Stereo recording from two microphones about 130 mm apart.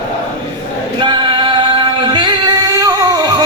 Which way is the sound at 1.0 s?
40° right (ahead or behind).